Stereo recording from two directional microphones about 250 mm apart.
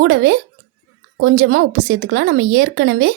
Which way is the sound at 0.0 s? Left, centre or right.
Right.